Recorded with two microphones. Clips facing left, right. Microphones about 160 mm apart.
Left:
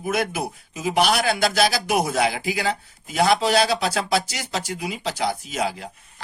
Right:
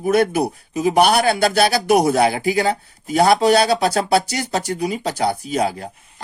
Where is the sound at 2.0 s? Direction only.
40° right (ahead or behind).